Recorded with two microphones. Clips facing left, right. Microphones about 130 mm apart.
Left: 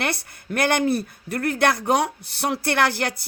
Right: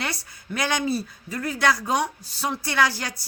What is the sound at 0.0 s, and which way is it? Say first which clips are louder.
Speech: left 5 dB; 60° left (ahead or behind).